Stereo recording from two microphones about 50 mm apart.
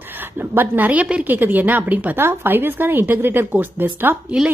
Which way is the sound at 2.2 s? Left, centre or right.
Right.